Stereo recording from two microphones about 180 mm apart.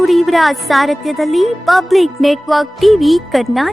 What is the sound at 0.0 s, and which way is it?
Music, centre (ahead or behind).